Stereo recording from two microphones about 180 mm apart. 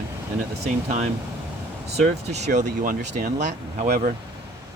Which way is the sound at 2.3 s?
40° right (ahead or behind).